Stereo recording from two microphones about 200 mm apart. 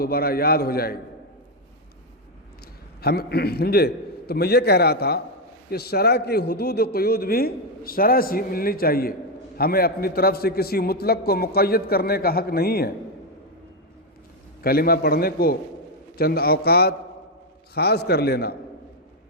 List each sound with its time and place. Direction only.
0.0 s a man's voice: 50° left (ahead or behind)
3.0 s a man's voice: 50° left (ahead or behind)
14.6 s a man's voice: 50° left (ahead or behind)